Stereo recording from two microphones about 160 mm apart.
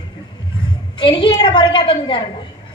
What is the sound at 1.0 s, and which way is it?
A woman's voice, 30° left (ahead or behind).